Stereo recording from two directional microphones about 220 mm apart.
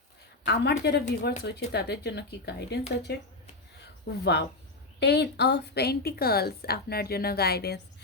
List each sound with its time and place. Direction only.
0.4 s a woman's voice: 50° left (ahead or behind)